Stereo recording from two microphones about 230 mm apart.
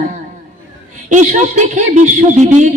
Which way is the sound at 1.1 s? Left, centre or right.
Right.